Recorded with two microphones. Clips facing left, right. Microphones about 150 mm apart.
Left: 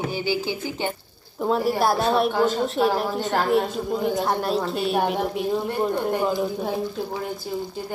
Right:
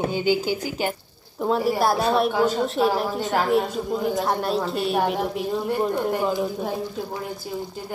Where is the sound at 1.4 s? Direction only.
Centre (ahead or behind).